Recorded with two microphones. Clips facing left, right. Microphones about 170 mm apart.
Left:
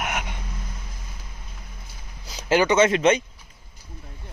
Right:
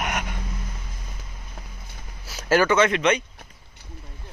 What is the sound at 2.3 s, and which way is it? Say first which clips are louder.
Speech: even; 15° left (ahead or behind).